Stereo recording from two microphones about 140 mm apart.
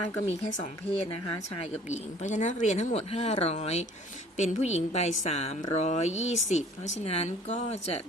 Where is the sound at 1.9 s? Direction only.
60° left (ahead or behind).